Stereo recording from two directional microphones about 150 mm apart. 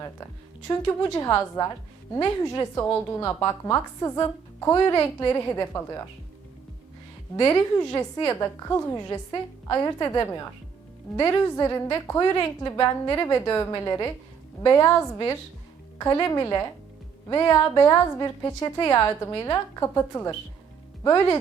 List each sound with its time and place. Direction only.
0.7 s a woman's voice: 15° left (ahead or behind)
7.3 s a woman's voice: 20° left (ahead or behind)